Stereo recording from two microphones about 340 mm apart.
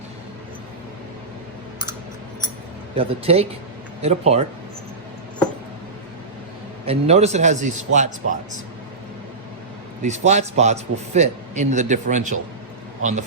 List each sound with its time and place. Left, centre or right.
2.9 s a man's voice: centre
6.8 s a man's voice: centre
10.0 s a man's voice: right